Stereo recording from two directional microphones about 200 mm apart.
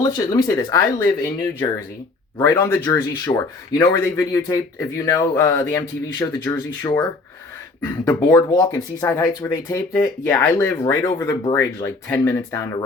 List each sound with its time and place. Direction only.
0.0 s speech: 15° left (ahead or behind)
8.0 s speech: 15° left (ahead or behind)